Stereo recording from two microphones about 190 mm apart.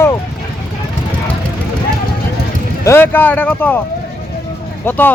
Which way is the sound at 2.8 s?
10° left (ahead or behind).